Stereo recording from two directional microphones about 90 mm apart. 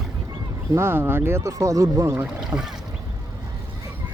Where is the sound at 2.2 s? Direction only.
5° right (ahead or behind).